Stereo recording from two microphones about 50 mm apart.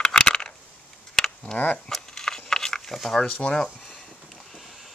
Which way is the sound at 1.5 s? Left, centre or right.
Centre.